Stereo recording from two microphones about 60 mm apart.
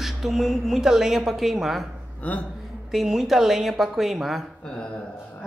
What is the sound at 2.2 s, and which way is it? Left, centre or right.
Speech, left.